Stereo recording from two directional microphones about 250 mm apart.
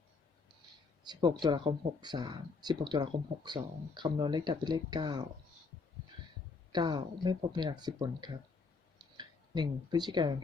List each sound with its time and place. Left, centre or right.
1.0 s speech: centre
6.7 s speech: centre